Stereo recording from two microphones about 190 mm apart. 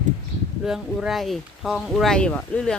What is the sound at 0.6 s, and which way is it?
Speech, centre (ahead or behind).